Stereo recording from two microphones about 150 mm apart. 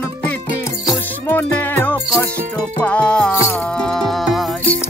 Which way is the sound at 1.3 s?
15° left (ahead or behind).